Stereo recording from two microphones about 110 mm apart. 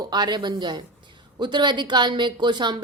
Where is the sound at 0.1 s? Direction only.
40° right (ahead or behind).